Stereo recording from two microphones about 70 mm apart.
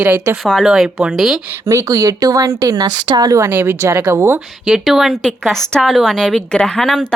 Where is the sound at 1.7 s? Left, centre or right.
Right.